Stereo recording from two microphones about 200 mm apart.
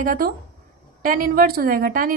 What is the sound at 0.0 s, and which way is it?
Speech, 45° right (ahead or behind).